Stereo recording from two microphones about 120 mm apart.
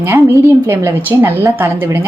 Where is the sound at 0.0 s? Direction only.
20° right (ahead or behind).